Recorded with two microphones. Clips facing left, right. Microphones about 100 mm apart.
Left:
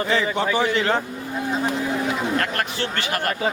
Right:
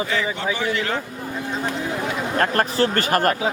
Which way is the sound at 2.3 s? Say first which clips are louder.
Right 5 dB; 35° right (ahead or behind).